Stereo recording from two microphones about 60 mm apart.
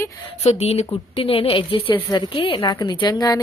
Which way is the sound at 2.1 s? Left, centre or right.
Left.